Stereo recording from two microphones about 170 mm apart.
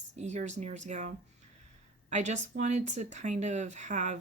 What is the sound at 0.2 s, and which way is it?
Speech, 45° right (ahead or behind).